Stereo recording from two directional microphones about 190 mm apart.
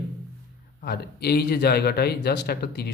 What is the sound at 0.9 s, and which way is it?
A man's voice, 55° left (ahead or behind).